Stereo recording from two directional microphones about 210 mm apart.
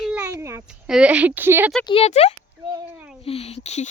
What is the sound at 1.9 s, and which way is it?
A child's voice, 30° left (ahead or behind).